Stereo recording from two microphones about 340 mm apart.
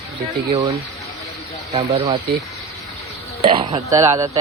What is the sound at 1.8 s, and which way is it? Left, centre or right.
Speech, centre.